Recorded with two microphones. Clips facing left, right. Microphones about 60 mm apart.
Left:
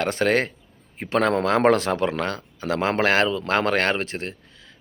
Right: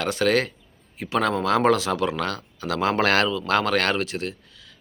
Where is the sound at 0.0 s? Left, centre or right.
Left.